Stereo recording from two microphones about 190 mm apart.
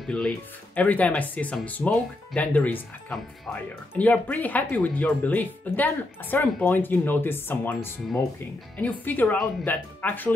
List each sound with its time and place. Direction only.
0.0 s speech: 5° left (ahead or behind)